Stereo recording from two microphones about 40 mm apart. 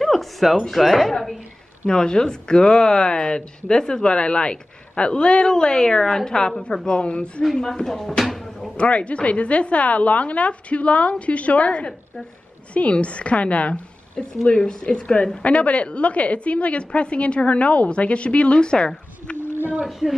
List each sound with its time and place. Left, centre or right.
0.0 s a sound: centre
0.6 s speech: centre
1.9 s speech: centre
7.7 s speech: centre
8.2 s a sound: centre
8.7 s a woman's voice: left
14.1 s speech: left
15.4 s a woman's voice: left
19.3 s a sound: right